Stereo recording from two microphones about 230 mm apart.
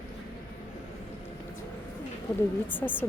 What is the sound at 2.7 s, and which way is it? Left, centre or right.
Speech, centre.